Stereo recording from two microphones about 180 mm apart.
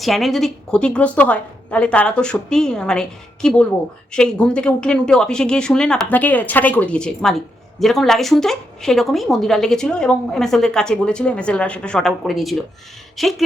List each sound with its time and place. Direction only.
0.0 s speech: centre (ahead or behind)